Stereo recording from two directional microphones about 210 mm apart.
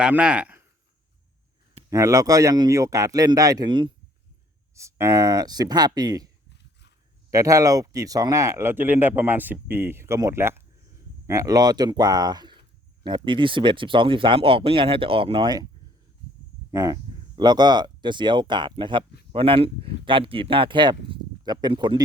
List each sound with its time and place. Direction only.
0.0 s speech: 5° right (ahead or behind)
1.9 s speech: 15° right (ahead or behind)
7.3 s speech: 15° right (ahead or behind)
16.7 s speech: 15° right (ahead or behind)